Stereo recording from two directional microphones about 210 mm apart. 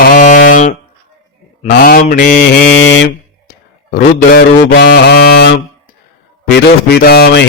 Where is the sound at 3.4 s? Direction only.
45° left (ahead or behind).